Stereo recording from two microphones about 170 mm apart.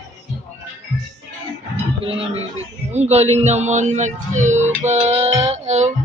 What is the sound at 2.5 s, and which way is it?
Speech, 40° right (ahead or behind).